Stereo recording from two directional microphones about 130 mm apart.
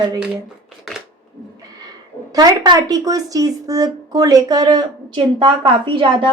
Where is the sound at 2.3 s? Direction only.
30° right (ahead or behind).